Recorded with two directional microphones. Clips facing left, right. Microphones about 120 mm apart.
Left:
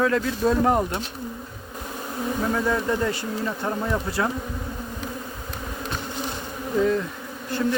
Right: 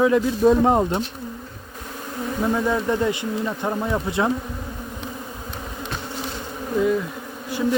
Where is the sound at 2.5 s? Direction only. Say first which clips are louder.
Right 3 dB; 15° right (ahead or behind).